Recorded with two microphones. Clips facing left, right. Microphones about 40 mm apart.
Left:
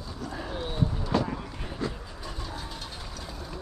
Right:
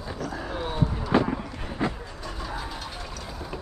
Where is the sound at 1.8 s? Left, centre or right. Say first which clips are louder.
Right 5 dB; right.